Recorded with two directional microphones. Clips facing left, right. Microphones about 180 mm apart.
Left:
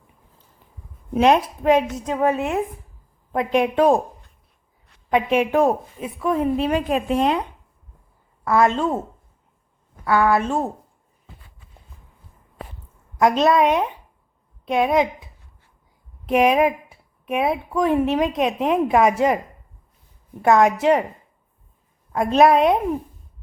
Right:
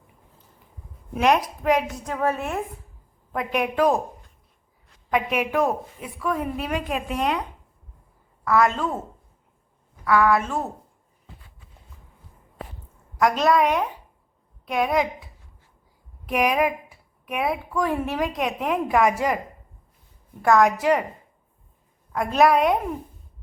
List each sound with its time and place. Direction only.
1.1 s a woman's voice: 25° left (ahead or behind)
5.1 s a woman's voice: 30° left (ahead or behind)
8.4 s a woman's voice: 25° left (ahead or behind)
10.0 s a woman's voice: 30° left (ahead or behind)
13.1 s a woman's voice: 25° left (ahead or behind)
20.4 s a woman's voice: 25° left (ahead or behind)
22.1 s a woman's voice: 25° left (ahead or behind)